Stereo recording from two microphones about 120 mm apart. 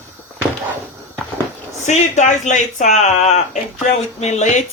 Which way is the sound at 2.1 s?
85° left.